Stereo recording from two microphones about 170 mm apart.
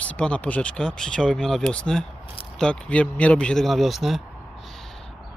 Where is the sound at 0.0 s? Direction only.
5° left (ahead or behind).